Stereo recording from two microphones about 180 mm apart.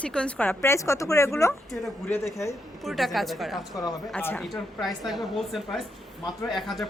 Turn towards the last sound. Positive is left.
turn(degrees=0)  # may be behind; listen again after turning